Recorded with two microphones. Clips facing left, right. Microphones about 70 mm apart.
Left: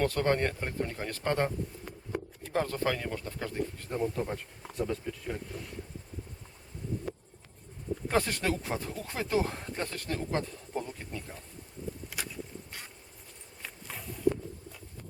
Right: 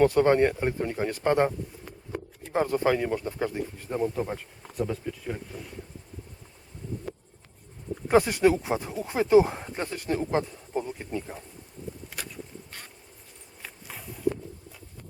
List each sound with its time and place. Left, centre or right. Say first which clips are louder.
0.0 s speech: right 8 dB; centre
8.0 s speech: right 9 dB; centre
13.6 s walk: right 1 dB; centre